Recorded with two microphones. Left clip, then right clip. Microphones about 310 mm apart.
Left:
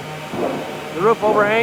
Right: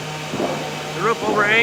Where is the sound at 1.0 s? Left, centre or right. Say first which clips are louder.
Left 3 dB; centre.